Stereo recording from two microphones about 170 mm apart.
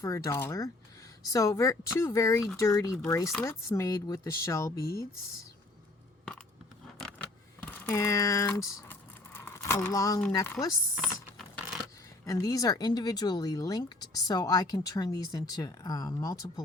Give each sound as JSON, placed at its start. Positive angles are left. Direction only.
{"t": 0.0, "sound": "speech", "side_deg": 20}
{"t": 4.8, "sound": "speech", "side_deg": 65}
{"t": 7.0, "sound": "a sound", "side_deg": 5}
{"t": 10.3, "sound": "speech", "side_deg": 15}
{"t": 10.9, "sound": "a sound", "side_deg": 0}
{"t": 12.2, "sound": "speech", "side_deg": 20}